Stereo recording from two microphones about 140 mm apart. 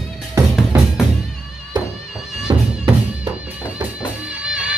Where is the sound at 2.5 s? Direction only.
30° right (ahead or behind).